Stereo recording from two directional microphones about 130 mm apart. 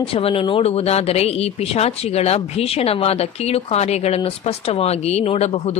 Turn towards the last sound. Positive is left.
turn(degrees=55)  # may be behind; listen again after turning